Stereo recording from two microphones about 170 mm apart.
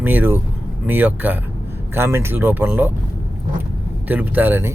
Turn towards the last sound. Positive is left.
turn(degrees=-15)  # may be behind; listen again after turning